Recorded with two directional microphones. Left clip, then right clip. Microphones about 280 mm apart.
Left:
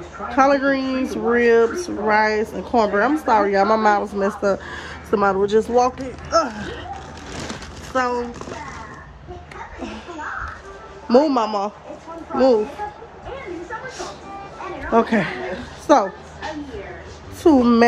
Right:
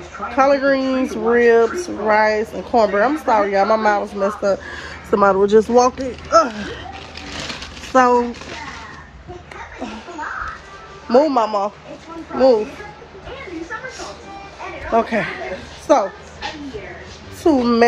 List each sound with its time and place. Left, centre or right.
0.3 s speech: centre
7.9 s speech: centre
11.1 s speech: centre
13.8 s music: centre
14.9 s a sound: centre
17.4 s speech: centre